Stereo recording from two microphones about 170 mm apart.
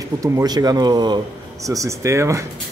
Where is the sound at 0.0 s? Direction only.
20° right (ahead or behind).